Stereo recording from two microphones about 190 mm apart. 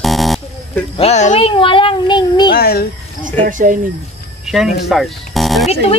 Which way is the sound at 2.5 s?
55° left (ahead or behind).